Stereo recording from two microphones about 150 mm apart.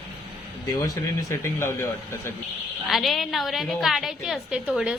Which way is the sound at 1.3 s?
15° left (ahead or behind).